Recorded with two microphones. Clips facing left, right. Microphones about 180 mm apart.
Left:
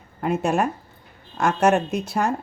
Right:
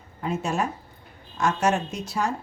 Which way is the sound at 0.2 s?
55° left (ahead or behind).